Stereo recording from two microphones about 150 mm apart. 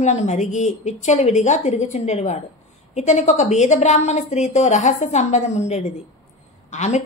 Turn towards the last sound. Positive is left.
turn(degrees=50)  # may be behind; listen again after turning